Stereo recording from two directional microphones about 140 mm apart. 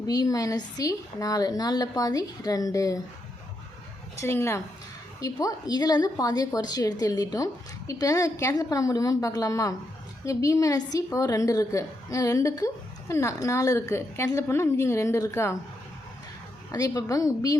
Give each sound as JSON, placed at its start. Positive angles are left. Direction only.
{"t": 0.1, "sound": "a woman's voice", "side_deg": 25}
{"t": 4.2, "sound": "a woman's voice", "side_deg": 20}
{"t": 16.7, "sound": "a woman's voice", "side_deg": 25}